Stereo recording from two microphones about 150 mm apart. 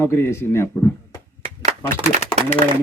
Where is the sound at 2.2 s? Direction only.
50° left (ahead or behind).